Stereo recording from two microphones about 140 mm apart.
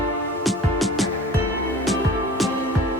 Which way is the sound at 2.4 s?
Centre (ahead or behind).